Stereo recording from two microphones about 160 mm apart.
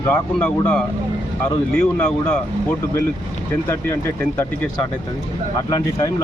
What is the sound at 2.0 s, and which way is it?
Speech, 10° left (ahead or behind).